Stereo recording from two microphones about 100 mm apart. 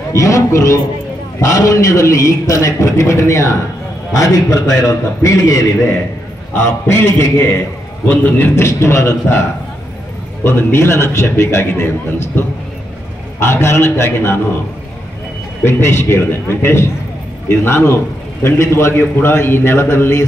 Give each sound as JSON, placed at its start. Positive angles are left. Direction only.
{"t": 0.1, "sound": "a man's voice", "side_deg": 30}
{"t": 13.4, "sound": "a man's voice", "side_deg": 25}
{"t": 15.6, "sound": "a man's voice", "side_deg": 25}